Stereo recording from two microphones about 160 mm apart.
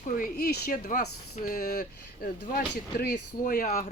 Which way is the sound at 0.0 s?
65° left (ahead or behind).